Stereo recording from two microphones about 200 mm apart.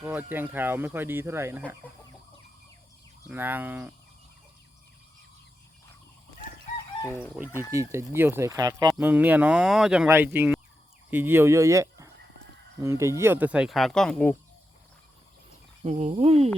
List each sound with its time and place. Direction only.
0.0 s speech: 10° right (ahead or behind)
3.2 s speech: 10° right (ahead or behind)
7.0 s chicken: 10° left (ahead or behind)
7.3 s speech: 10° right (ahead or behind)
9.0 s speech: 10° right (ahead or behind)
15.8 s speech: 35° right (ahead or behind)